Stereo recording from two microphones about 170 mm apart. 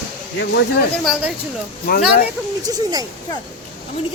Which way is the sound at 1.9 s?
55° left (ahead or behind).